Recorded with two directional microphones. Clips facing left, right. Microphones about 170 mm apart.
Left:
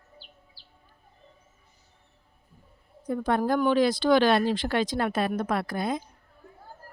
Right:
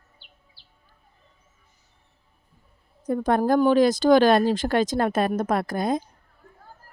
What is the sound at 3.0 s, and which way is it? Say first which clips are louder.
A woman's voice: right 4 dB; 45° right (ahead or behind).